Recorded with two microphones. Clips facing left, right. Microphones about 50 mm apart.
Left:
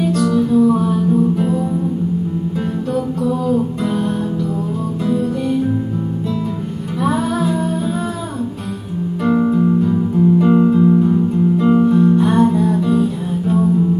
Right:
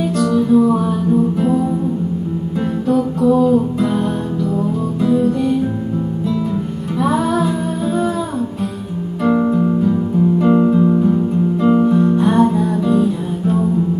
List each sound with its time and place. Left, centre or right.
0.0 s music: centre
2.9 s music: centre
5.0 s music: centre
7.0 s music: centre
9.2 s music: centre